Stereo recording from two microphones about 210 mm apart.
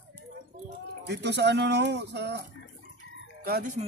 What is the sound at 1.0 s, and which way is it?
Speech, 55° right (ahead or behind).